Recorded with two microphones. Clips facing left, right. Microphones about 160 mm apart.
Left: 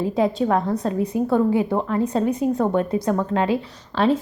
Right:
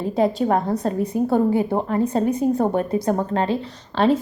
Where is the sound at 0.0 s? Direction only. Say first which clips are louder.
Even; centre (ahead or behind).